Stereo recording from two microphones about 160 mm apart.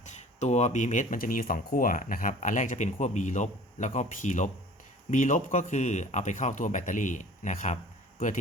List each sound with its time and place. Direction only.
0.0 s speech: 45° left (ahead or behind)